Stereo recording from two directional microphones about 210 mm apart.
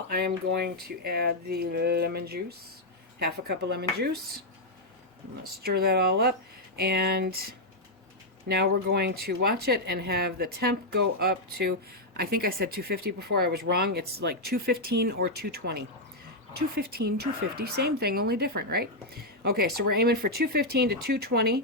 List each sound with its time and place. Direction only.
0.1 s a woman's voice: 45° right (ahead or behind)
5.4 s a woman's voice: 45° right (ahead or behind)
8.4 s a woman's voice: 50° right (ahead or behind)